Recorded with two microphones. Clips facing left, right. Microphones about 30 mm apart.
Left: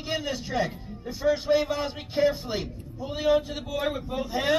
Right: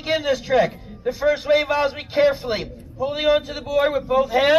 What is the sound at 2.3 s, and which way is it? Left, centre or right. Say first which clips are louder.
A man's voice: right 7 dB; right.